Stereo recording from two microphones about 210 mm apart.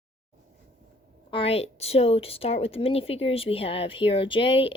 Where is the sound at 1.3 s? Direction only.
25° left (ahead or behind).